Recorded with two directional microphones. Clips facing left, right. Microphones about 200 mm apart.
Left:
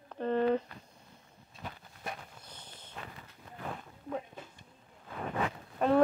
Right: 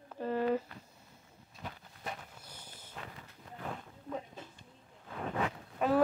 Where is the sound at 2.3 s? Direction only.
10° right (ahead or behind).